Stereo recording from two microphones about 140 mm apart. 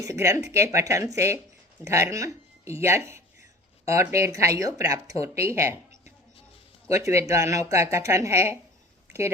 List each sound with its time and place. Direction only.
0.0 s speech: 20° right (ahead or behind)
6.9 s speech: 20° right (ahead or behind)